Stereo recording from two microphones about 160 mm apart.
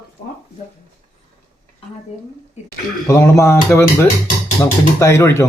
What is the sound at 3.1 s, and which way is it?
Speech, 20° left (ahead or behind).